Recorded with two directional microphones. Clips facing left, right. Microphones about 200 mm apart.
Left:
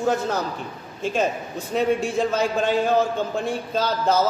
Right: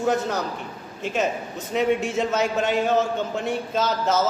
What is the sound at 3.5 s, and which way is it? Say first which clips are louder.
Speech: even; 20° right (ahead or behind).